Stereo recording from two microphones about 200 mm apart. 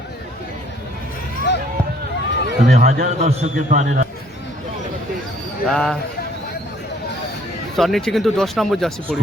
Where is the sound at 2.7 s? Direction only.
50° right (ahead or behind).